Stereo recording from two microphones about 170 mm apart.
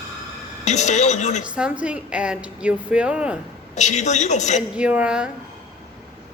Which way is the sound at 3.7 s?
45° left (ahead or behind).